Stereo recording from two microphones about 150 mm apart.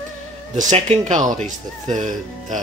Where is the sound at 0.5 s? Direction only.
55° right (ahead or behind).